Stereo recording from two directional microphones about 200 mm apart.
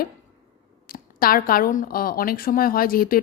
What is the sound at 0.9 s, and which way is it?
A woman's voice, 45° left (ahead or behind).